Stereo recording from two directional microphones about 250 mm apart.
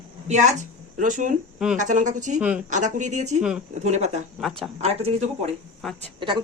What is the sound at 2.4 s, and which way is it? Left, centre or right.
Speech, centre.